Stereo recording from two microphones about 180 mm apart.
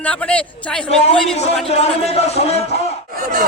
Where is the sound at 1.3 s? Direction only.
35° left (ahead or behind).